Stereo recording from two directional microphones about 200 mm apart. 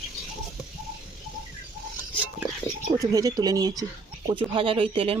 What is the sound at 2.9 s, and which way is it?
Speech, 15° right (ahead or behind).